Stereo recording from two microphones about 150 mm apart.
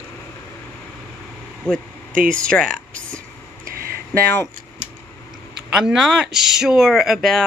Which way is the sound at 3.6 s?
75° right (ahead or behind).